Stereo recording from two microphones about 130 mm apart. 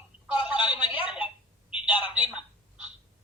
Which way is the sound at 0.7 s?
45° left (ahead or behind).